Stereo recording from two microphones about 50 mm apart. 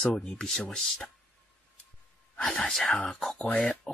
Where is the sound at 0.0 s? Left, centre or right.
Centre.